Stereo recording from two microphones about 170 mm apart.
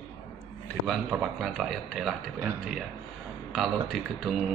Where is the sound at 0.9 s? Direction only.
5° right (ahead or behind).